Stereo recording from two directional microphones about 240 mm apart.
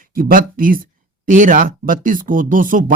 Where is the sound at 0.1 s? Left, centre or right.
Right.